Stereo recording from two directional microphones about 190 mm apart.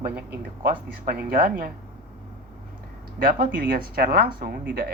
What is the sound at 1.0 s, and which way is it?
Speech, 50° right (ahead or behind).